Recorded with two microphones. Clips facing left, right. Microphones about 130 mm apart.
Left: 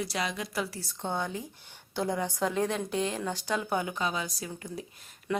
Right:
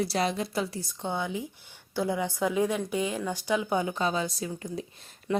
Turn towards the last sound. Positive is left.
turn(degrees=-20)  # may be behind; listen again after turning